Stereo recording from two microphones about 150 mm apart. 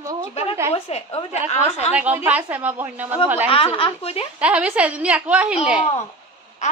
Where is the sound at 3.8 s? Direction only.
40° left (ahead or behind).